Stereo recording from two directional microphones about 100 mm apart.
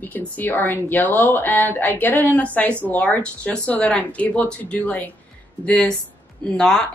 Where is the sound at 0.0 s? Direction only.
20° left (ahead or behind).